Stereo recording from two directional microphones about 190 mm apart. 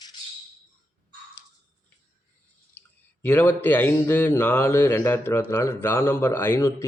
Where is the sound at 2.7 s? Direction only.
10° left (ahead or behind).